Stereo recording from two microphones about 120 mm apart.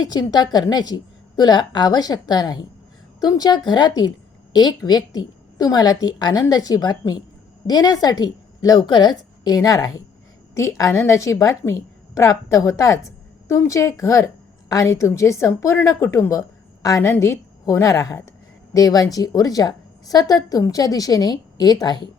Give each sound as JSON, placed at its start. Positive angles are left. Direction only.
{"t": 0.0, "sound": "a woman's voice", "side_deg": 35}